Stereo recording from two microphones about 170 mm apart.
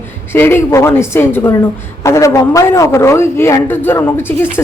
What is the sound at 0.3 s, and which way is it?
A man's voice, 15° left (ahead or behind).